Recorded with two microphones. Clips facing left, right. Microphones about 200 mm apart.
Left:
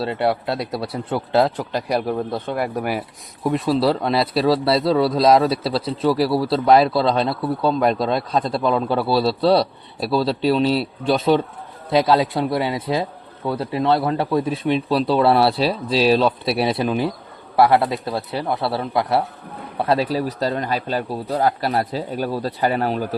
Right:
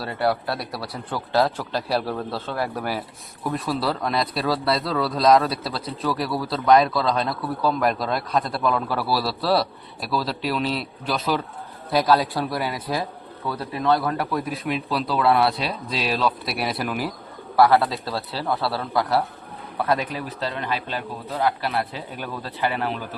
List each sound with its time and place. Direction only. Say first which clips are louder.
0.0 s a man's voice: left 3 dB; 25° left (ahead or behind)
3.7 s a man's voice: left 7 dB; 25° left (ahead or behind)